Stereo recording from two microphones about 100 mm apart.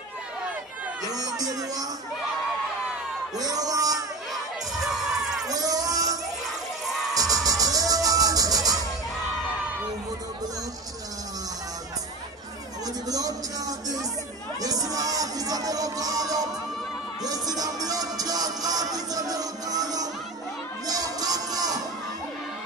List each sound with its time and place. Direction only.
1.1 s music: 40° right (ahead or behind)
3.3 s music: 40° right (ahead or behind)
4.3 s crowd: 5° right (ahead or behind)
5.5 s music: 35° right (ahead or behind)
7.4 s music: 35° right (ahead or behind)
12.8 s a sound: 40° right (ahead or behind)
17.2 s music: 40° right (ahead or behind)